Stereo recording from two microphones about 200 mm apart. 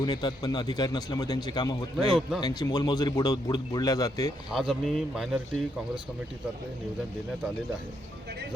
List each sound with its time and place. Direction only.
0.0 s a man's voice: 20° left (ahead or behind)
2.0 s speech: centre (ahead or behind)
2.4 s a man's voice: 20° left (ahead or behind)
4.5 s speech: centre (ahead or behind)